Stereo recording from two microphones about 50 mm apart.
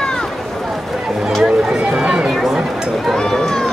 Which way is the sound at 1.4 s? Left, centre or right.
Centre.